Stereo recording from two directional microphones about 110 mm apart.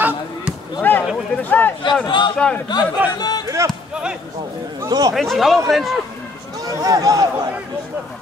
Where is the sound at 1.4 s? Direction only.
15° left (ahead or behind).